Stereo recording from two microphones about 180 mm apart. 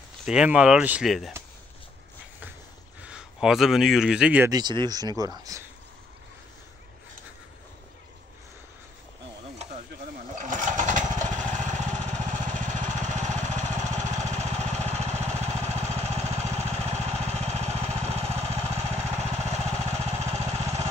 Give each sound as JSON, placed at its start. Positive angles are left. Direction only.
{"t": 0.2, "sound": "speech", "side_deg": -5}
{"t": 3.0, "sound": "speech", "side_deg": -5}
{"t": 4.5, "sound": "speech", "side_deg": -25}
{"t": 10.3, "sound": "lawn mower", "side_deg": -45}